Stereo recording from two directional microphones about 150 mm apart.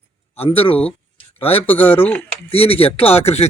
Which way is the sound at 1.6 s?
10° left (ahead or behind).